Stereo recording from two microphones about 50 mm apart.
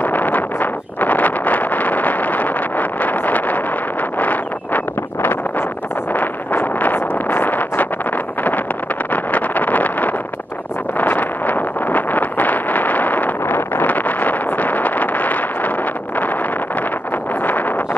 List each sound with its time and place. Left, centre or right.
0.0 s wind noise: left
4.2 s a sound: left
6.1 s vehicle: left
9.1 s vehicle: left
13.8 s a sound: left
17.4 s vehicle: left